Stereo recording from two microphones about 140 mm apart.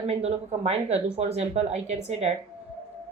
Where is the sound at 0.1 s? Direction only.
50° right (ahead or behind).